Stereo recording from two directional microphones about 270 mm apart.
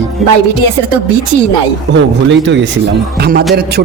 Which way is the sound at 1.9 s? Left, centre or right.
Right.